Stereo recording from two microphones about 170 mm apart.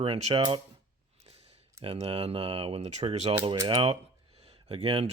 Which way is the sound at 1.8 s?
35° right (ahead or behind).